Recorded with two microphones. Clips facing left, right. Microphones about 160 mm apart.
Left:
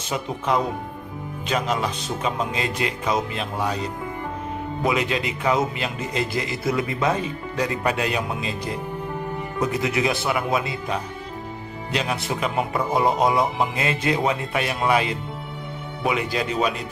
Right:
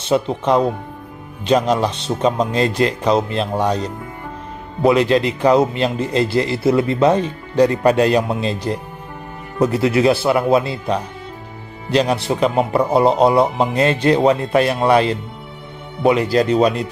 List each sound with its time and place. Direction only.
0.1 s a man's voice: 30° right (ahead or behind)
5.0 s a man's voice: 35° right (ahead or behind)
9.8 s a man's voice: 30° right (ahead or behind)